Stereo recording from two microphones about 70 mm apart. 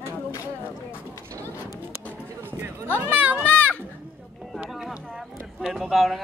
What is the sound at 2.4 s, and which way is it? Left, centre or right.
Speech, right.